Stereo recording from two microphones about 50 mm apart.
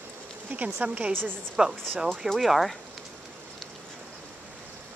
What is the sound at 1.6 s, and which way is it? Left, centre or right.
Speech, centre.